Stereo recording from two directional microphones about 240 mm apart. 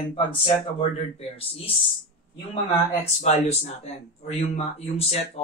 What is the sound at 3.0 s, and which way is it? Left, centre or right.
A man's voice, left.